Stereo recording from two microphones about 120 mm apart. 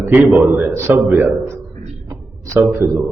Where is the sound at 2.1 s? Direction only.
25° right (ahead or behind).